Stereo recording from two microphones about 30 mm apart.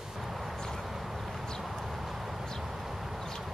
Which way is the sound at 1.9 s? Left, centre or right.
Centre.